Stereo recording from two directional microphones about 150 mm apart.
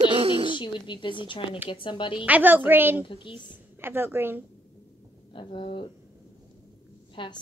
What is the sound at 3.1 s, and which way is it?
Speech, 35° left (ahead or behind).